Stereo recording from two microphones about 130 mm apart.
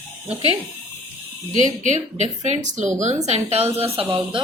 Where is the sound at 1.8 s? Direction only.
65° right (ahead or behind).